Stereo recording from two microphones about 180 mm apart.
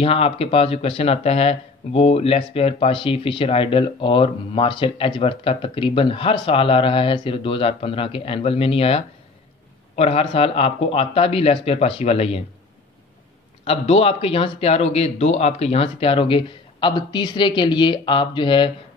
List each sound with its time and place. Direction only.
0.0 s speech: 30° left (ahead or behind)
13.7 s speech: 35° left (ahead or behind)